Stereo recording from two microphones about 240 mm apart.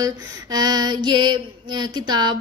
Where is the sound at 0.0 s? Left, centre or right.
Centre.